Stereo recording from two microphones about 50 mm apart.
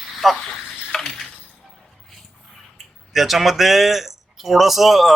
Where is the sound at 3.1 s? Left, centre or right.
Centre.